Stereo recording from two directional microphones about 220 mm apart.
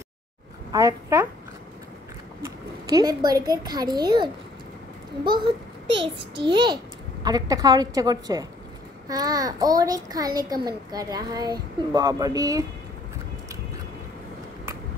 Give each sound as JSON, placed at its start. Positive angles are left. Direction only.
{"t": 0.7, "sound": "a woman's voice", "side_deg": -15}
{"t": 2.4, "sound": "a child's voice", "side_deg": -15}